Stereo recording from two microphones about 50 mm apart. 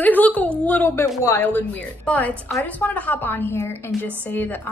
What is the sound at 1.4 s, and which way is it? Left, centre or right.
A woman's voice, left.